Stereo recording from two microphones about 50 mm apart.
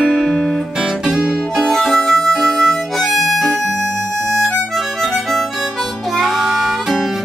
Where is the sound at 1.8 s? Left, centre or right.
Centre.